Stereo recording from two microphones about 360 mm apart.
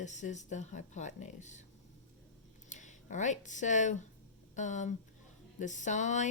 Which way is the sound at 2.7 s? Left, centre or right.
Centre.